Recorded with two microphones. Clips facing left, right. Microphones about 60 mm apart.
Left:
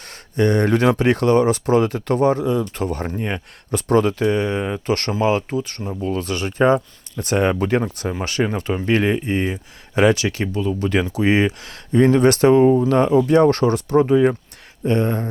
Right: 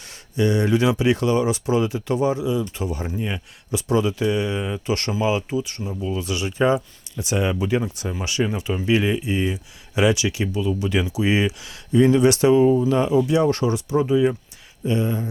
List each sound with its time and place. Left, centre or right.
0.3 s speech: left